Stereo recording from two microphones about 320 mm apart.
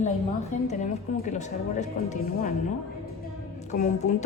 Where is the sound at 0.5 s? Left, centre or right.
Left.